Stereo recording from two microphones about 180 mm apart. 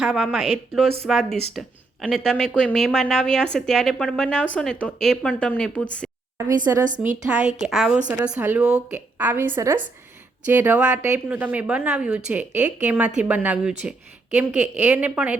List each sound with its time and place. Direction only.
0.0 s speech: centre (ahead or behind)
6.6 s speech: 45° right (ahead or behind)
7.3 s a woman's voice: 10° right (ahead or behind)